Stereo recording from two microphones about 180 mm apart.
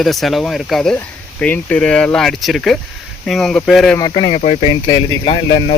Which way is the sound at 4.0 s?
25° left (ahead or behind).